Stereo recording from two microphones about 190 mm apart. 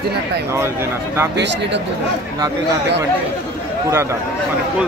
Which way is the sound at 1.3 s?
65° right (ahead or behind).